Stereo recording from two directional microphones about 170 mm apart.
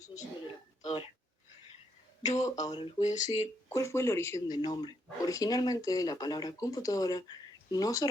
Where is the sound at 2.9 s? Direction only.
45° left (ahead or behind).